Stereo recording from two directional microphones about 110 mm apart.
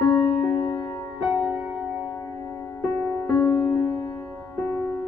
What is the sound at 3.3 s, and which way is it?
Music, 30° left (ahead or behind).